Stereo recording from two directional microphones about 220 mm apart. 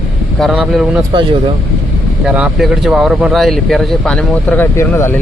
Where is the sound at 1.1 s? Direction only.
20° right (ahead or behind).